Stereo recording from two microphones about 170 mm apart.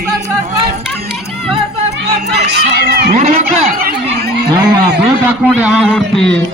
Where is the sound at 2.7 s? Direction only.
75° right (ahead or behind).